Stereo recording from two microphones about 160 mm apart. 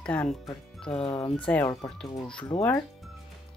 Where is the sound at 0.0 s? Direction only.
10° left (ahead or behind).